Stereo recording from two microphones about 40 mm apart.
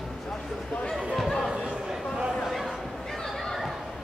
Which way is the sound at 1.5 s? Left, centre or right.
Right.